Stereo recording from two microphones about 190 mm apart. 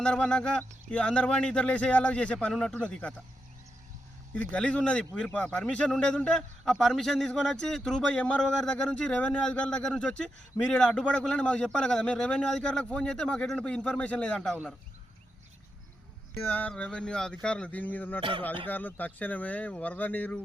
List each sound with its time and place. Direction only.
0.0 s a man's voice: 5° left (ahead or behind)
4.4 s a man's voice: 5° left (ahead or behind)
16.5 s speech: 10° left (ahead or behind)
18.2 s speech: 25° right (ahead or behind)
18.7 s speech: 10° left (ahead or behind)